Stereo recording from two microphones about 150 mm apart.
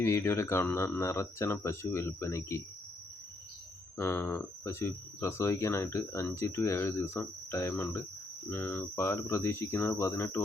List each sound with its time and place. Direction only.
0.0 s speech: 15° left (ahead or behind)
3.9 s speech: 15° left (ahead or behind)